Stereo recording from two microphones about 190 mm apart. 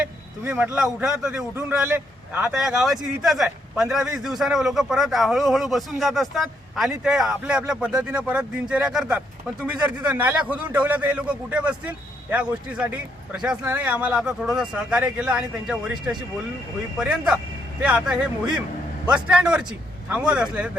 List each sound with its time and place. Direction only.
0.0 s a man's voice: 10° right (ahead or behind)